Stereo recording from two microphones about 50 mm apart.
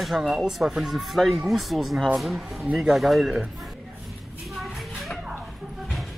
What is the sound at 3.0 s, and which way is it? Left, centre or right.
Speech, centre.